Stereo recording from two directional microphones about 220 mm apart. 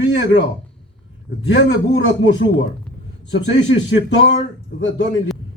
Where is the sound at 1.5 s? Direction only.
55° left (ahead or behind).